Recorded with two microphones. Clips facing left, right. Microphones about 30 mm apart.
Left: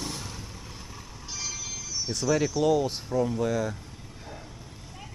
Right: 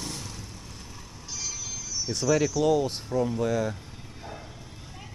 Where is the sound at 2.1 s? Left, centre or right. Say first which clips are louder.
Right 2 dB; centre.